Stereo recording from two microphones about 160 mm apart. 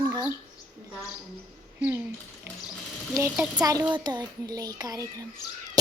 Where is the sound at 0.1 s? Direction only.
20° right (ahead or behind).